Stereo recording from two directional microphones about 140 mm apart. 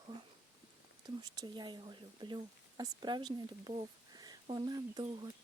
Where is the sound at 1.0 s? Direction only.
30° right (ahead or behind).